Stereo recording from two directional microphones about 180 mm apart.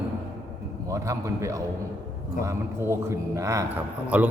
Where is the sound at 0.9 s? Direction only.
15° right (ahead or behind).